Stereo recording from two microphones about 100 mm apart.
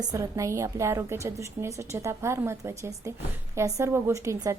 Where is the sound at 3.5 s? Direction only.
30° right (ahead or behind).